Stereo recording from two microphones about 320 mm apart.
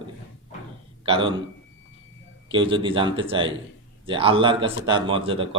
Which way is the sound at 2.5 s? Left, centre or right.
Centre.